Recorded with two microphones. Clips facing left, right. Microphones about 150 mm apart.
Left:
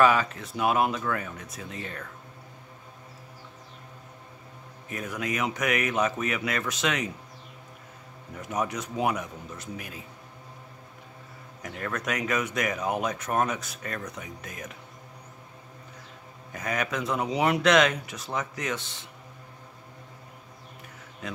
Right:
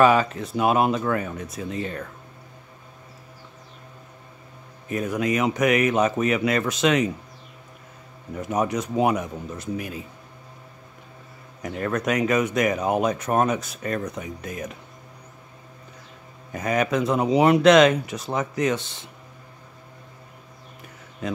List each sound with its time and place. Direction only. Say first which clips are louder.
0.0 s speech: right 4 dB; 25° right (ahead or behind)
4.8 s speech: right 8 dB; 30° right (ahead or behind)
8.5 s speech: right 6 dB; 30° right (ahead or behind)
11.6 s speech: right 7 dB; 30° right (ahead or behind)
16.5 s speech: right 7 dB; 25° right (ahead or behind)